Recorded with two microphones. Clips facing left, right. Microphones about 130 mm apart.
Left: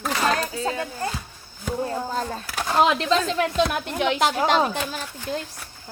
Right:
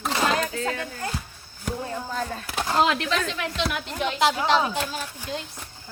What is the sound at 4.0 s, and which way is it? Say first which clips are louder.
Speech: left 2 dB; 65° left (ahead or behind).